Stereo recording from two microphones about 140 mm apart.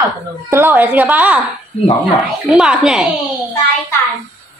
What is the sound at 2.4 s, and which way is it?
Speech, 5° right (ahead or behind).